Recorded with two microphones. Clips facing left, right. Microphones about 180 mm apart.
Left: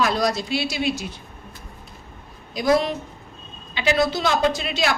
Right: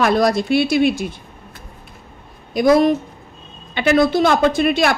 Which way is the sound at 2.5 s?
50° right (ahead or behind).